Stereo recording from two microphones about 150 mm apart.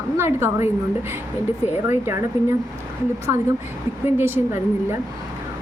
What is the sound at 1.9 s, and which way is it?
Speech, 15° right (ahead or behind).